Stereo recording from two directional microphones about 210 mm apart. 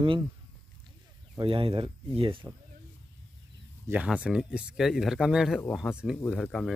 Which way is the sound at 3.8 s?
5° right (ahead or behind).